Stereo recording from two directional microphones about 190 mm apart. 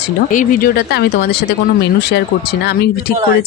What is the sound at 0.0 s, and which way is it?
Speech, 45° left (ahead or behind).